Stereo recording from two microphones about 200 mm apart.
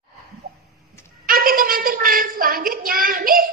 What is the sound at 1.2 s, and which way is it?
A woman's voice, 45° right (ahead or behind).